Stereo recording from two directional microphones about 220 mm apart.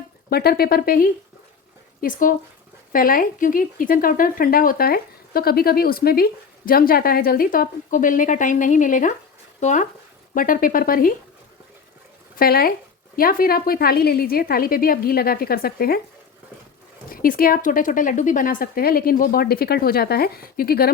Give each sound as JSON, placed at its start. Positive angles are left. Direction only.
{"t": 0.3, "sound": "a woman's voice", "side_deg": 45}
{"t": 12.4, "sound": "a woman's voice", "side_deg": 40}
{"t": 17.1, "sound": "speech", "side_deg": 40}